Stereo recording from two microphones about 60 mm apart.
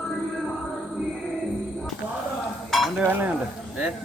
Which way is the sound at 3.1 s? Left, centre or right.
Right.